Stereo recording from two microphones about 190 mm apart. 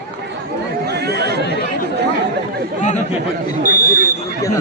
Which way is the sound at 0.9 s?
60° right (ahead or behind).